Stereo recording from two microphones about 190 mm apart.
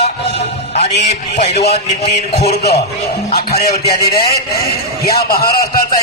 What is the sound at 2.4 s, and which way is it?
A man's voice, 55° left (ahead or behind).